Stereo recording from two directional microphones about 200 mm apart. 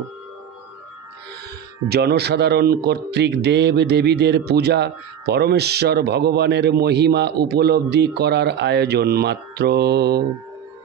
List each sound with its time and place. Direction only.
1.9 s speech: 55° right (ahead or behind)